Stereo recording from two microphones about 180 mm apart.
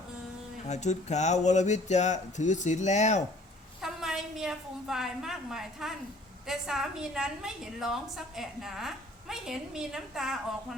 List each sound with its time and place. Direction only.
0.7 s speech: 40° left (ahead or behind)
3.8 s a woman's voice: centre (ahead or behind)